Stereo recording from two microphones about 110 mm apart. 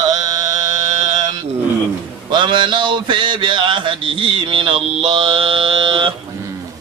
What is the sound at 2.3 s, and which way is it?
Mantra, 45° right (ahead or behind).